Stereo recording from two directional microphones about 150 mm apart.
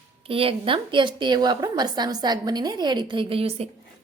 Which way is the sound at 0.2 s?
40° right (ahead or behind).